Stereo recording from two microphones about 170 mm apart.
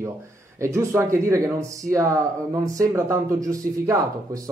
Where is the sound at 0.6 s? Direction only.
15° right (ahead or behind).